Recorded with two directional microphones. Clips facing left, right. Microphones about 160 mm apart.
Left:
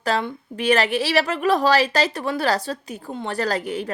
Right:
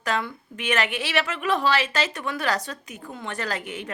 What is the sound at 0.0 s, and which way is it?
A woman's voice, 30° left (ahead or behind).